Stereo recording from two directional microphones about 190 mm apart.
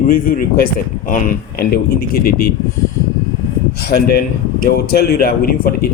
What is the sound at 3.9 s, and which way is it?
A man's voice, 55° left (ahead or behind).